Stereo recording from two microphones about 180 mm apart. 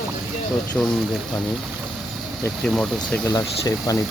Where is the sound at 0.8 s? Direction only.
5° left (ahead or behind).